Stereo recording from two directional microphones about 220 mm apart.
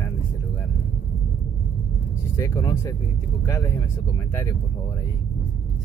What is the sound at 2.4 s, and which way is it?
Speech, 15° left (ahead or behind).